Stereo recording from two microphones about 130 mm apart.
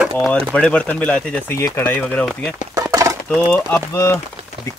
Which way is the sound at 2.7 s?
25° right (ahead or behind).